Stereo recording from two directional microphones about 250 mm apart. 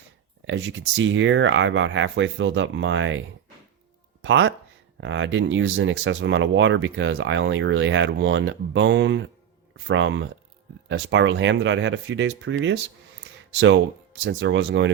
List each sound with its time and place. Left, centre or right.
0.4 s speech: right
4.2 s speech: right